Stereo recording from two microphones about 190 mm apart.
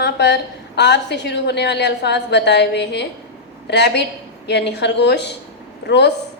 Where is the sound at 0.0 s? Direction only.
60° left (ahead or behind).